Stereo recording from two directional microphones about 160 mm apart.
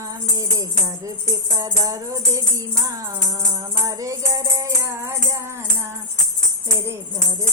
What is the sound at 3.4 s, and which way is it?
Music, 20° right (ahead or behind).